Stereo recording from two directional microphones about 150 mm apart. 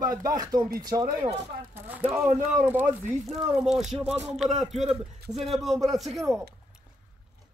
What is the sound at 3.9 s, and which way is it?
Speech, 45° right (ahead or behind).